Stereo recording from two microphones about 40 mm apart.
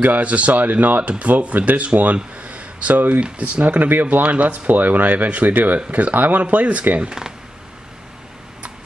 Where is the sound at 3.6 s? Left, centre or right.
Right.